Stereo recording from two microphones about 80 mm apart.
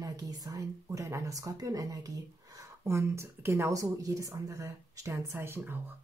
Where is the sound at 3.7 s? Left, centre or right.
Right.